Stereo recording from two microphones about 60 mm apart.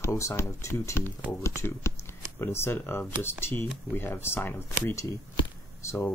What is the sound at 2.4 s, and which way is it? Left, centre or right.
Speech, left.